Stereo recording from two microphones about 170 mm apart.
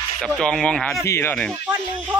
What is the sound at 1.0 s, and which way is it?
Speech, 15° left (ahead or behind).